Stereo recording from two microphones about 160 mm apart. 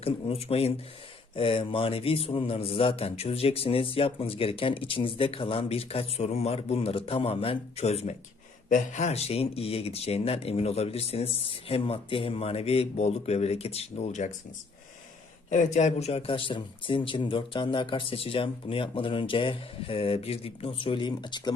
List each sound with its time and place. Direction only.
0.0 s a man's voice: 40° left (ahead or behind)
15.4 s a man's voice: 50° left (ahead or behind); by 21.5 s 25° left (ahead or behind)